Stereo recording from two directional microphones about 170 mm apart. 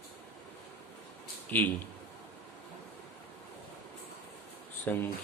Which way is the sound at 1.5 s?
10° left (ahead or behind).